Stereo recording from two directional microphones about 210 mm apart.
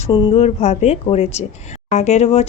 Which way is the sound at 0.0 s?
25° left (ahead or behind).